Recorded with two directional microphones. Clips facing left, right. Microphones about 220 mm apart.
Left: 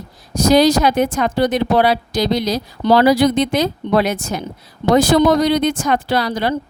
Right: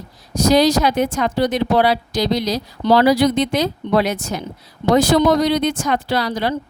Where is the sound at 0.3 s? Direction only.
50° left (ahead or behind).